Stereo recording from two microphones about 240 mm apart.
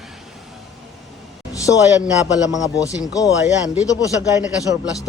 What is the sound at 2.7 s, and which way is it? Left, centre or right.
Speech, centre.